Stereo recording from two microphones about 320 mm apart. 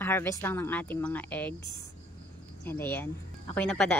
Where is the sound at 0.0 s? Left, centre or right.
Centre.